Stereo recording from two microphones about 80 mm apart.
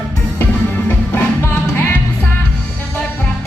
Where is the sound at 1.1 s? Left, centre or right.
Left.